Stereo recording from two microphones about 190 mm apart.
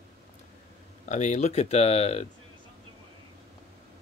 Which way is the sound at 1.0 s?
40° left (ahead or behind).